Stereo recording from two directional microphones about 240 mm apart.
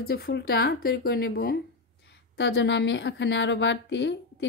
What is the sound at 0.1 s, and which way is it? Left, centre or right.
A woman's voice, left.